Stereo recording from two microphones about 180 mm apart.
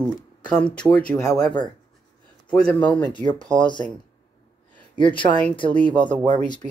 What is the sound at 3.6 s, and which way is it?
Speech, 25° left (ahead or behind).